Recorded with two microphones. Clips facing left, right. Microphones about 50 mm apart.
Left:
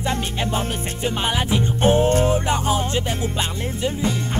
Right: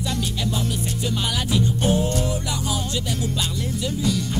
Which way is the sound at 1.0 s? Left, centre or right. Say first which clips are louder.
Left 5 dB; left.